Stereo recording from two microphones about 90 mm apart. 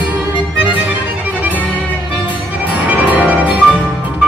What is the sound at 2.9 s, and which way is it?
Music, 15° right (ahead or behind).